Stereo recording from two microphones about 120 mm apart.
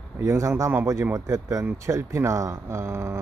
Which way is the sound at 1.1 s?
25° right (ahead or behind).